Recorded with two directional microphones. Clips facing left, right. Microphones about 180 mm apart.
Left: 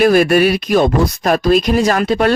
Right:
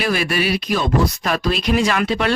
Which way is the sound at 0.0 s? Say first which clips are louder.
Left 10 dB; 50° left (ahead or behind).